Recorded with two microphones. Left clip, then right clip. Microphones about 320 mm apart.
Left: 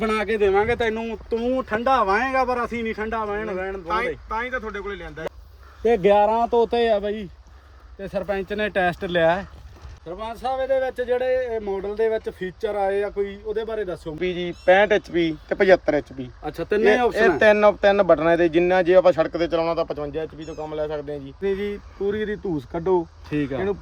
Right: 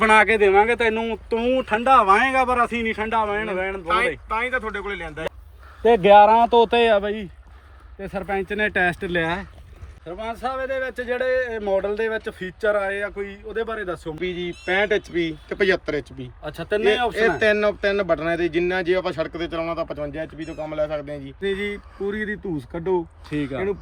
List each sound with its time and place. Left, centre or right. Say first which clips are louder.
0.0 s speech: right 9 dB; centre
0.4 s speech: right 3 dB; centre
5.9 s speech: right 5 dB; right
6.6 s speech: right 3 dB; centre
14.2 s speech: left 1 dB; left
21.4 s speech: even; centre